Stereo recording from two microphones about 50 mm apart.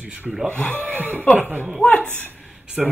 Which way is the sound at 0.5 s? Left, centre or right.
Left.